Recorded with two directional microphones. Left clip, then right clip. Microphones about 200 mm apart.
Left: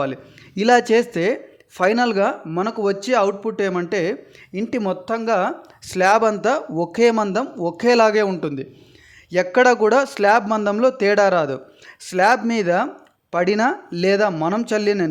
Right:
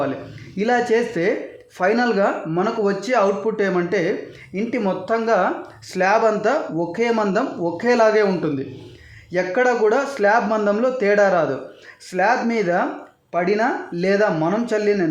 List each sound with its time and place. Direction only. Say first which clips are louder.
0.5 s speech: left 3 dB; 50° left (ahead or behind)